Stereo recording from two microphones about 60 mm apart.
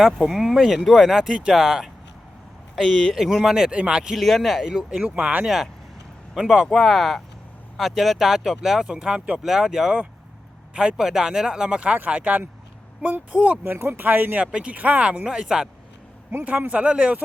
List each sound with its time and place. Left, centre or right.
0.0 s speech: centre
4.2 s speech: centre
4.6 s speech: centre
6.3 s speech: centre
6.7 s speech: centre; by 13.7 s right
13.7 s speech: right
14.0 s speech: right
14.4 s speech: centre
16.6 s speech: right
16.8 s speech: centre